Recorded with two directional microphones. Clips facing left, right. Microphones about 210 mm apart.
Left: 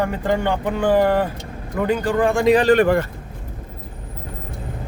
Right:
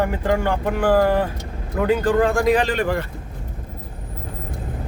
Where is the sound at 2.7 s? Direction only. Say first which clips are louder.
Left 7 dB; 55° left (ahead or behind).